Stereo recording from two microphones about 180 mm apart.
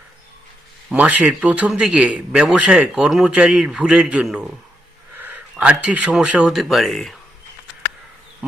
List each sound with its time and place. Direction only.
0.9 s a man's voice: 5° right (ahead or behind)